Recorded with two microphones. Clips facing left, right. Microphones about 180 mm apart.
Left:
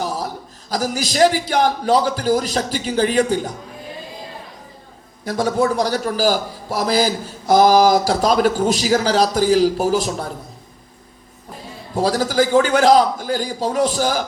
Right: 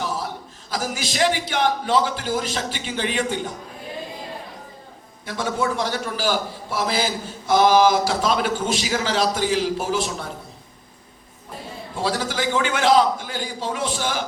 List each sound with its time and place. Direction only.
0.0 s a sound: 40° left (ahead or behind)
0.7 s a man's voice: 40° left (ahead or behind)
5.2 s a man's voice: 40° left (ahead or behind)
11.9 s a man's voice: 40° left (ahead or behind)